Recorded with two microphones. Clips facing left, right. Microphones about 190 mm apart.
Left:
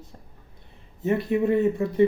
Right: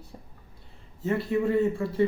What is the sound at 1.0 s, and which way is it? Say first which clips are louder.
Speech: left 3 dB; 20° left (ahead or behind).